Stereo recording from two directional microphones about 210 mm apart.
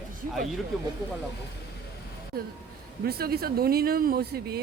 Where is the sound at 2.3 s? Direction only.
45° right (ahead or behind).